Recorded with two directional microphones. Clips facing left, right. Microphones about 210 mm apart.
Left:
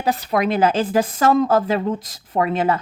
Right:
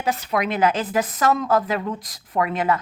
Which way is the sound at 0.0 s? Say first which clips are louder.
Left 3 dB; 35° left (ahead or behind).